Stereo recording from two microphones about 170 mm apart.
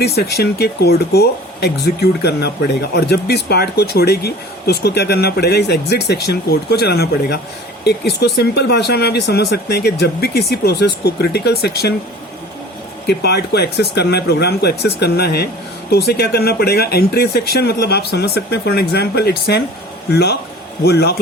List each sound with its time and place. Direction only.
0.0 s speech: 70° left (ahead or behind)
13.1 s speech: 75° left (ahead or behind)